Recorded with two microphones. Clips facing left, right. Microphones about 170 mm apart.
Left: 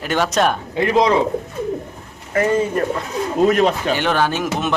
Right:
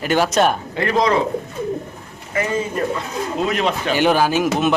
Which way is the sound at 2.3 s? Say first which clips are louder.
Left 4 dB; 45° left (ahead or behind).